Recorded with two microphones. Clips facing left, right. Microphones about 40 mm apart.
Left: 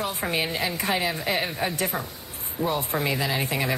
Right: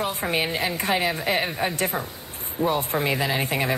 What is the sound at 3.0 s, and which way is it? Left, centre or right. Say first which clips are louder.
Speech: right 2 dB; right.